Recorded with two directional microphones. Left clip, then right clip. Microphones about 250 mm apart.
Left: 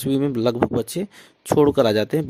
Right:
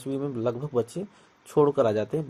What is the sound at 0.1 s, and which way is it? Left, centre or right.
Speech, left.